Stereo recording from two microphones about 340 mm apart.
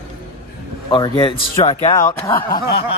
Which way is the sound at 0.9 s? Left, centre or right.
Centre.